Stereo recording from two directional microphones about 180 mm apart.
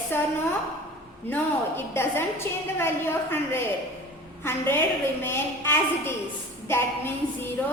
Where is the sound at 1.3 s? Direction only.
15° left (ahead or behind).